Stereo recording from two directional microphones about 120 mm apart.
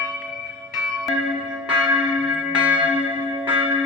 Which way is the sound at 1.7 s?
10° right (ahead or behind).